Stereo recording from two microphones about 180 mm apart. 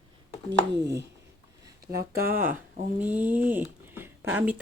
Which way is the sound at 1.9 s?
10° right (ahead or behind).